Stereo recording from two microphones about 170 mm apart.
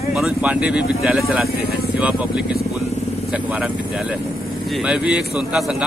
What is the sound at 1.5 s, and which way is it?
Speech, 65° left (ahead or behind).